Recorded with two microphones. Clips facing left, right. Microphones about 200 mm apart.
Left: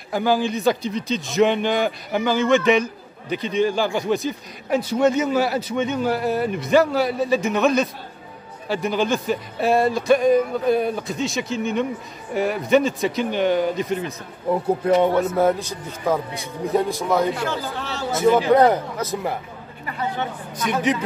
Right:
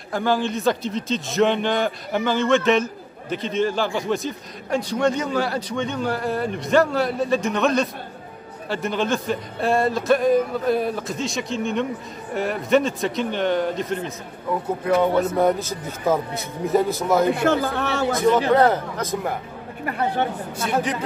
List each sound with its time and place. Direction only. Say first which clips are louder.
0.1 s a man's voice: left 2 dB; 5° left (ahead or behind)
15.3 s a man's voice: even; centre (ahead or behind)
17.5 s speech: right 6 dB; 60° right (ahead or behind)
18.1 s a man's voice: left 3 dB; 5° left (ahead or behind)
19.8 s speech: right 4 dB; 60° right (ahead or behind)
20.7 s speech: left 2 dB; 35° right (ahead or behind)